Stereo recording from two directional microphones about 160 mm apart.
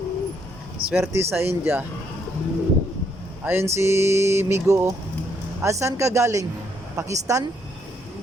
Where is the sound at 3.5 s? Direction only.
15° right (ahead or behind).